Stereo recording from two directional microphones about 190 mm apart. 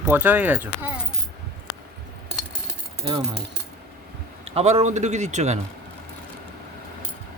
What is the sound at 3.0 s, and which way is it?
Speech, 30° right (ahead or behind).